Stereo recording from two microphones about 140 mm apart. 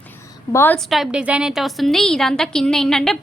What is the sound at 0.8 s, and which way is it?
A woman's voice, centre (ahead or behind).